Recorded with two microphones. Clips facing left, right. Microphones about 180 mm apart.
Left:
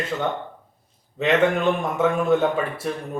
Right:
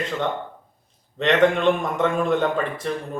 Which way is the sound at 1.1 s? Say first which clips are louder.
Right 1 dB; 5° left (ahead or behind).